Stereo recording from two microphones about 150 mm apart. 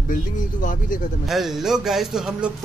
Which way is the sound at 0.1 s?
60° left (ahead or behind).